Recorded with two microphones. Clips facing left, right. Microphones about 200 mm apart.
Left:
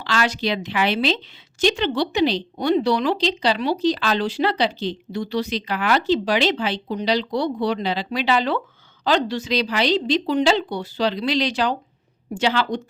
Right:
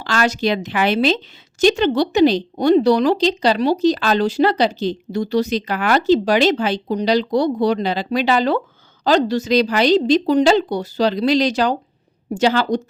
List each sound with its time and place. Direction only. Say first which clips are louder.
0.0 s a woman's voice: right 4 dB; 45° right (ahead or behind)